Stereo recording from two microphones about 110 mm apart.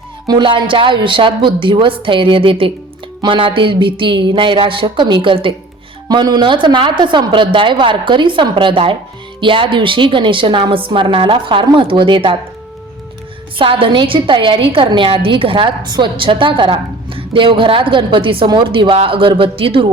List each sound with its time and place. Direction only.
0.3 s a woman's voice: 45° right (ahead or behind)
6.1 s a woman's voice: 40° right (ahead or behind)
13.6 s a woman's voice: 55° right (ahead or behind)